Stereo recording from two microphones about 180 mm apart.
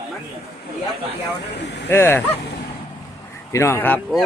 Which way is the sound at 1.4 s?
70° left (ahead or behind).